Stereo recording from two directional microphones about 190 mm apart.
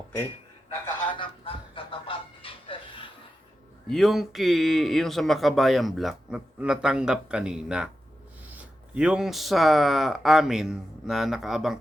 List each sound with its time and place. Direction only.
1.2 s music: 25° left (ahead or behind)
3.8 s speech: centre (ahead or behind)